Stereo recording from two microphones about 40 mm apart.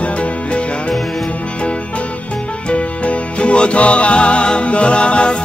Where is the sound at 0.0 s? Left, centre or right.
Left.